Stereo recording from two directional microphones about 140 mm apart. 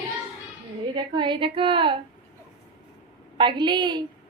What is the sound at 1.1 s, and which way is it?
Speech, 35° right (ahead or behind).